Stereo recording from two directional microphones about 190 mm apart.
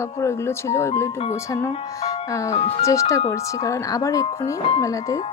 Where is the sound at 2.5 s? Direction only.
35° left (ahead or behind).